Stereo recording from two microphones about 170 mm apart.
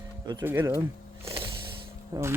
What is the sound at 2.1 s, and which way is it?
Speech, 20° right (ahead or behind).